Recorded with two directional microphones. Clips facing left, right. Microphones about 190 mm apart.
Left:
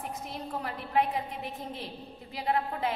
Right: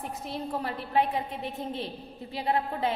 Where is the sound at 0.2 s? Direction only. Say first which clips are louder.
Right 4 dB; 30° right (ahead or behind).